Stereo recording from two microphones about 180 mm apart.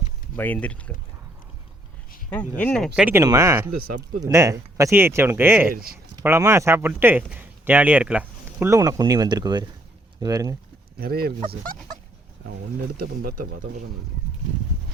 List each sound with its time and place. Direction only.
0.3 s speech: 10° left (ahead or behind)
2.6 s speech: 5° left (ahead or behind); by 5.7 s 10° right (ahead or behind)
5.7 s speech: 55° right (ahead or behind)
6.2 s speech: 15° right (ahead or behind)
11.0 s speech: 55° right (ahead or behind)
13.2 s speech: 55° right (ahead or behind)